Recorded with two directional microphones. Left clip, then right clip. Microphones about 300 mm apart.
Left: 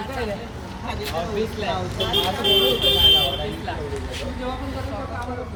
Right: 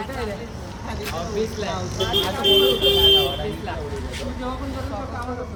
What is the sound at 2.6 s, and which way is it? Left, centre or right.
Speech, right.